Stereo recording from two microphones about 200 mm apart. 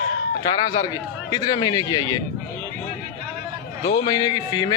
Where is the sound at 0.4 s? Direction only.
20° left (ahead or behind).